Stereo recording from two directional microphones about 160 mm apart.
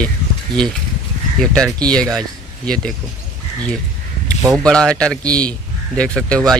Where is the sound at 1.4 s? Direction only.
5° left (ahead or behind).